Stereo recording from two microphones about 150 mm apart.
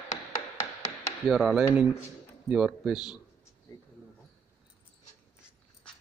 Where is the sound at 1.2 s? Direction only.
Centre (ahead or behind).